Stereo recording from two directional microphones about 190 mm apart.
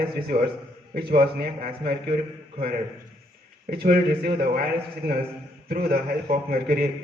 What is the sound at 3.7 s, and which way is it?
A man's voice, 55° right (ahead or behind).